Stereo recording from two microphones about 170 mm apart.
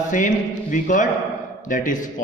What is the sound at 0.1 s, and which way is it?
A woman's voice, 50° left (ahead or behind).